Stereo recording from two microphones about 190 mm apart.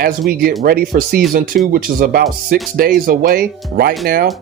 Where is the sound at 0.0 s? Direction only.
50° right (ahead or behind).